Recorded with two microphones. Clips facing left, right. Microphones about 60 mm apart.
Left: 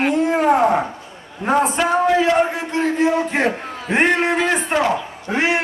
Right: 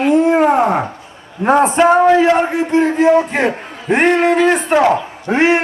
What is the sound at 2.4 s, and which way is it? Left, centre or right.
A man's voice, right.